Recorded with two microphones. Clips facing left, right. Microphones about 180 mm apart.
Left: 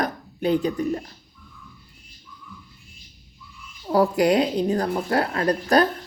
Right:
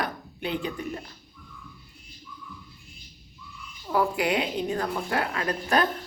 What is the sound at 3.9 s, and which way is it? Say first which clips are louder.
A woman's voice: left 6 dB; 40° left (ahead or behind).